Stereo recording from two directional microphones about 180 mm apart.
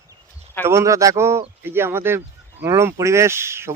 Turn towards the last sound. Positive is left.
turn(degrees=-15)  # may be behind; listen again after turning